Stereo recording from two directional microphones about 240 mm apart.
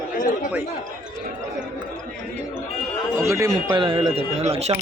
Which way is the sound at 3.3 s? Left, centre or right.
Centre.